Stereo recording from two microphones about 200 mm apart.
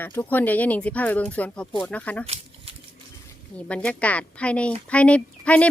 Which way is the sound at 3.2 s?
5° left (ahead or behind).